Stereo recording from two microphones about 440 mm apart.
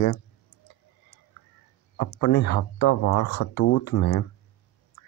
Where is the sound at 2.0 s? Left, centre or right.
Left.